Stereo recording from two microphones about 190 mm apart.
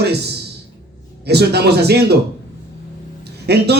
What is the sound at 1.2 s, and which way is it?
Speech, 60° right (ahead or behind).